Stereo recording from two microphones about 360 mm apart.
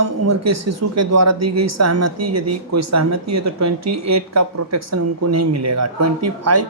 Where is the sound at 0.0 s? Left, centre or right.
Right.